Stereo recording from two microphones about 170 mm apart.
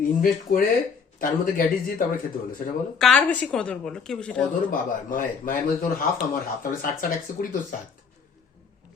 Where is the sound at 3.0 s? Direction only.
5° left (ahead or behind).